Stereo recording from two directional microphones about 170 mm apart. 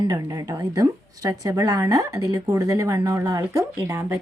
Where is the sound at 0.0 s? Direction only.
25° right (ahead or behind).